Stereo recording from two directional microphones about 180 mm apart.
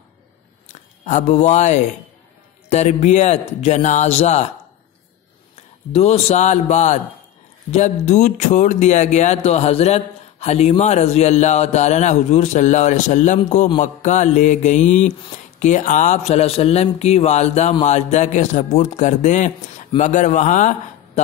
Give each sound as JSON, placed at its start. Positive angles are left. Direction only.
{"t": 0.7, "sound": "speech", "side_deg": 40}
{"t": 5.6, "sound": "a man's voice", "side_deg": 35}